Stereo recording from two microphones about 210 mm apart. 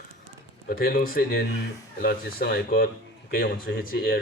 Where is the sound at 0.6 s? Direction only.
45° left (ahead or behind).